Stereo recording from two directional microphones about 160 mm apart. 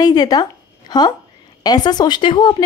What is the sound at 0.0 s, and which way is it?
A woman's voice, 25° left (ahead or behind).